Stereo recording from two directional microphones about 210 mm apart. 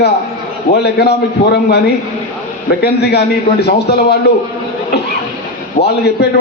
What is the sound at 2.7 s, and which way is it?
A man's voice, 50° left (ahead or behind).